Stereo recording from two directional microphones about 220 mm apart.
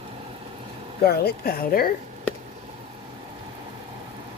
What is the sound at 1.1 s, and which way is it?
Speech, 45° left (ahead or behind).